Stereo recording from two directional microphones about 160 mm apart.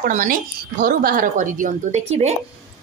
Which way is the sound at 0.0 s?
55° right (ahead or behind).